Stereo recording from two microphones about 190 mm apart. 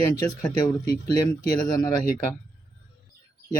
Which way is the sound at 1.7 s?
20° left (ahead or behind).